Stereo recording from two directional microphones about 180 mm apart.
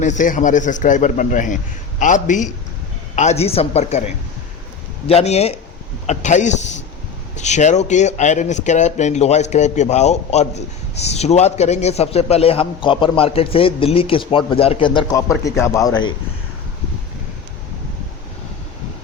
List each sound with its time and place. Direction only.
0.0 s a man's voice: 45° left (ahead or behind); by 15.0 s 25° left (ahead or behind)
15.1 s speech: 15° left (ahead or behind)